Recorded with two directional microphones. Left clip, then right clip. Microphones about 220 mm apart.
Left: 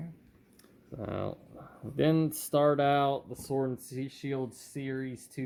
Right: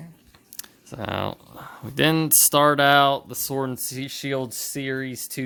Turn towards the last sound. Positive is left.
turn(degrees=-50)  # may be behind; listen again after turning